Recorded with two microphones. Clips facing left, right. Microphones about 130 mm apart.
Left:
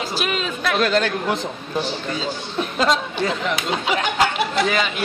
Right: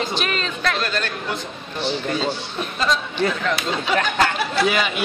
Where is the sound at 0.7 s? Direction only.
80° left.